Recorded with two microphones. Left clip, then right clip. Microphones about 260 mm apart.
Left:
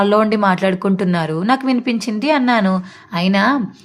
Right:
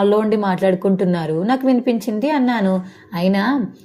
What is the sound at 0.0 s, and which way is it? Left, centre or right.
A woman's voice, centre.